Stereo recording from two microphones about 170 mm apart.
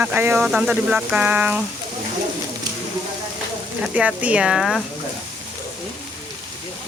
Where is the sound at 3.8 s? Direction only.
5° right (ahead or behind).